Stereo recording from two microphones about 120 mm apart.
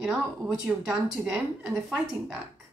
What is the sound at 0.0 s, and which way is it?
Speech, centre (ahead or behind).